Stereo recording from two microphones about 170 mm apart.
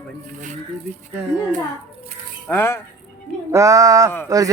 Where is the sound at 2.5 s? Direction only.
15° left (ahead or behind).